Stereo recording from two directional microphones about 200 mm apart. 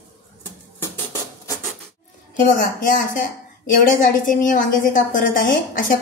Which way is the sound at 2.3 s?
45° left (ahead or behind).